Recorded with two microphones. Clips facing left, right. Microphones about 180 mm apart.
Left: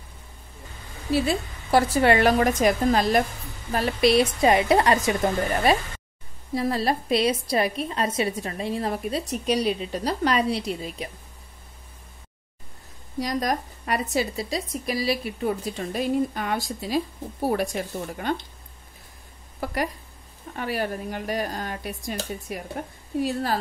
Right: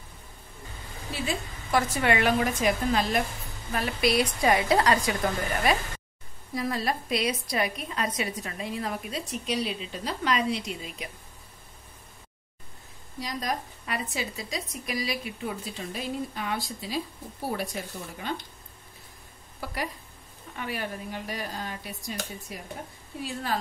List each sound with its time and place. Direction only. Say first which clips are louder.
1.1 s a woman's voice: left 9 dB; 35° left (ahead or behind)
13.2 s speech: left 6 dB; 45° left (ahead or behind)
15.4 s speech: left 7 dB; 55° left (ahead or behind)
19.6 s speech: left 6 dB; 50° left (ahead or behind)
23.2 s speech: left 4 dB; 40° left (ahead or behind)